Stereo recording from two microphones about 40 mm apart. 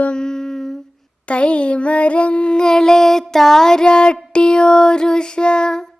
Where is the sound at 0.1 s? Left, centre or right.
Centre.